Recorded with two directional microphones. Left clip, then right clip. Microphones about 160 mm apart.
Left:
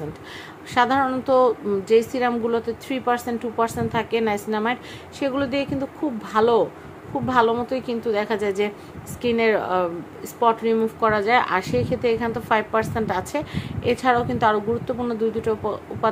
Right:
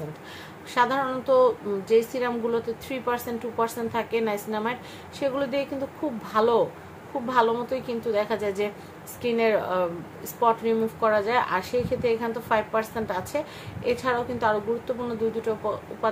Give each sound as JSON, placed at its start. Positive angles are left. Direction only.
{"t": 0.7, "sound": "a woman's voice", "side_deg": 30}